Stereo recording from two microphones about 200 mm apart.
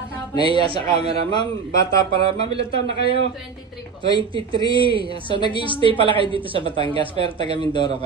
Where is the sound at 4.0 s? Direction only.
25° right (ahead or behind).